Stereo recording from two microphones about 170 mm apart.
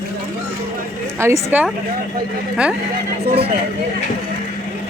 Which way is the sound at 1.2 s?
15° right (ahead or behind).